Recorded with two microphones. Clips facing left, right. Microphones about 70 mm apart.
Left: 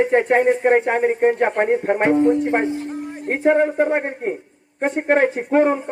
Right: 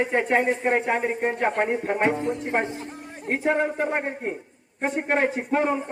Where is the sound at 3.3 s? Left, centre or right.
Left.